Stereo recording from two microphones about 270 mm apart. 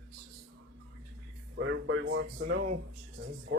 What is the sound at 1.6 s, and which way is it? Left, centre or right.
Speech, right.